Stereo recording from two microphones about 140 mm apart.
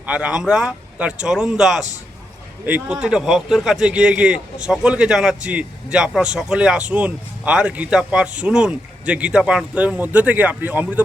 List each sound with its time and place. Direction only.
0.0 s speech: 10° right (ahead or behind)